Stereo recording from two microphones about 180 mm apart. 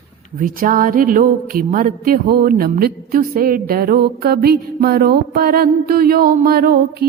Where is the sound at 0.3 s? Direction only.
50° right (ahead or behind).